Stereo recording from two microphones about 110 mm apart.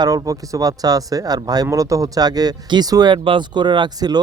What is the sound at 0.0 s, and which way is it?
Speech, 35° right (ahead or behind).